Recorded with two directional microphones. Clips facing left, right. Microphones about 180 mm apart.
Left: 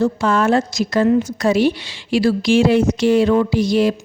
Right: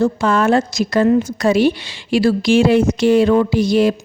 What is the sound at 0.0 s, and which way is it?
A woman's voice, 55° right (ahead or behind).